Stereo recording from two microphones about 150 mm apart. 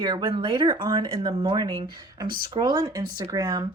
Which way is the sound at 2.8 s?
25° right (ahead or behind).